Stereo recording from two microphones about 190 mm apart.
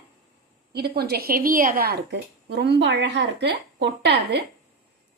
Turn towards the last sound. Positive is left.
turn(degrees=-65)  # may be behind; listen again after turning